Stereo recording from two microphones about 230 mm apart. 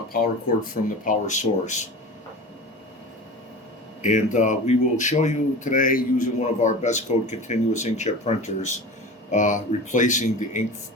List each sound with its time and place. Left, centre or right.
1.0 s speech: left
4.0 s speech: left